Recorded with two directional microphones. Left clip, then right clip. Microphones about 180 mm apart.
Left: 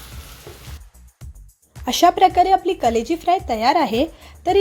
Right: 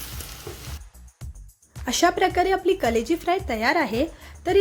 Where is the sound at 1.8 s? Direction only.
15° left (ahead or behind).